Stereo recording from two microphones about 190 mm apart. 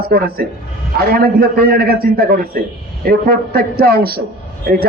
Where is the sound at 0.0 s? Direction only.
55° right (ahead or behind).